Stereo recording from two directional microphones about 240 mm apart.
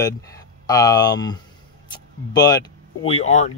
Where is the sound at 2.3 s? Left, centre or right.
Centre.